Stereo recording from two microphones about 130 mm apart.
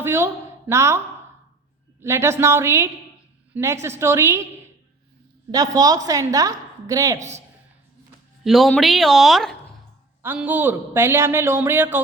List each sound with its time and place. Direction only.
0.0 s a woman's voice: 20° right (ahead or behind)
5.5 s a woman's voice: 30° right (ahead or behind)
7.2 s a man's voice: 60° right (ahead or behind)
8.4 s speech: centre (ahead or behind)
10.2 s a man's voice: 10° right (ahead or behind)